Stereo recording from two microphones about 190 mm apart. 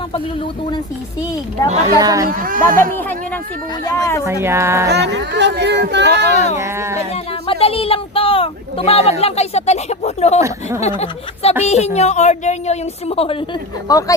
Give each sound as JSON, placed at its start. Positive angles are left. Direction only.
{"t": 2.0, "sound": "speech", "side_deg": -20}
{"t": 2.2, "sound": "speech", "side_deg": -45}
{"t": 3.8, "sound": "speech", "side_deg": 15}
{"t": 4.3, "sound": "speech", "side_deg": -15}
{"t": 4.9, "sound": "speech", "side_deg": -65}
{"t": 6.6, "sound": "speech", "side_deg": -15}
{"t": 7.4, "sound": "a woman's voice", "side_deg": 30}
{"t": 13.9, "sound": "speech", "side_deg": 20}